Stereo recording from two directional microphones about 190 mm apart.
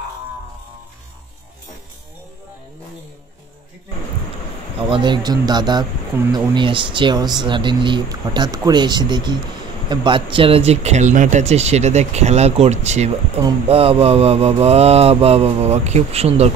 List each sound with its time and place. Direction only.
4.7 s speech: 25° right (ahead or behind)